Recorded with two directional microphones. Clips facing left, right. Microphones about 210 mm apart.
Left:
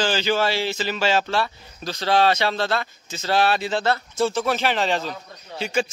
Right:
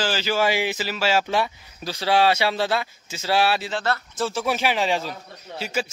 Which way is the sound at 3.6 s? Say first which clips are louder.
Left 3 dB; 20° left (ahead or behind).